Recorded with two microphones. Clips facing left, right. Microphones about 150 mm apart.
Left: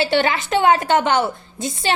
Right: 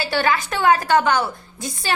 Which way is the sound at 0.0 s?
25° left (ahead or behind).